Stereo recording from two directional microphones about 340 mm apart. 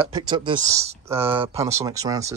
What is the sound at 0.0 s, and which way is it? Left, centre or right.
Speech, centre.